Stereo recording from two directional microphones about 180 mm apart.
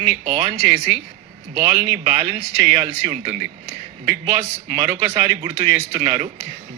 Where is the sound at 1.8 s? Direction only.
40° right (ahead or behind).